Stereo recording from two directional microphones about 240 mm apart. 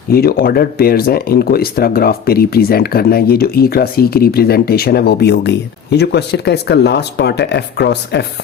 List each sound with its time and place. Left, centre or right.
0.1 s speech: left